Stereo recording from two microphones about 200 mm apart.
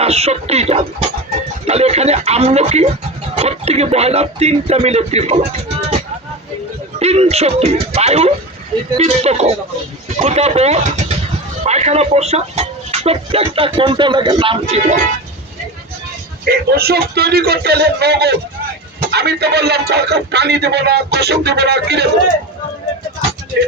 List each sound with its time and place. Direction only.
0.0 s speech: 30° right (ahead or behind)
7.0 s speech: 30° right (ahead or behind)
16.5 s a man's voice: 50° right (ahead or behind)